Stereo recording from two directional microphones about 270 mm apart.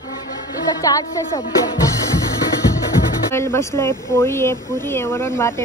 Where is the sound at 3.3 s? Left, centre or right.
Centre.